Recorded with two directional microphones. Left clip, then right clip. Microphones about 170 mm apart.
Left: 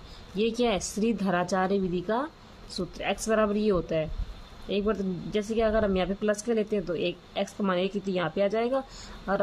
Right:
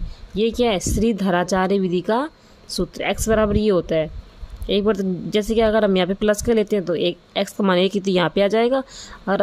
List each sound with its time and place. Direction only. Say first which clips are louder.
0.4 s a woman's voice: right 7 dB; 45° right (ahead or behind)